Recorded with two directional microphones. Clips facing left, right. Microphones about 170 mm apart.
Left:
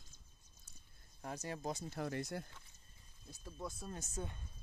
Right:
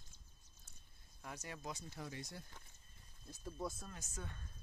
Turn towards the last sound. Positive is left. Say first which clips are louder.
# left 6 dB
turn(degrees=30)  # may be behind; listen again after turning